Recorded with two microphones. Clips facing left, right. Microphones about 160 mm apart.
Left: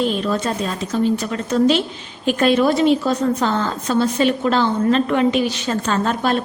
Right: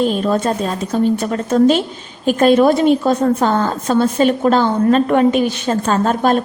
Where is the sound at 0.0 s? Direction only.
45° right (ahead or behind).